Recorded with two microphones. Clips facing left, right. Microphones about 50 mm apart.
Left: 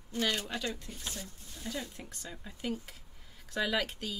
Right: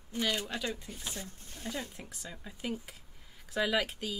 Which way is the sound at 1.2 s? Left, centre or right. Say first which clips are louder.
Right 1 dB; right.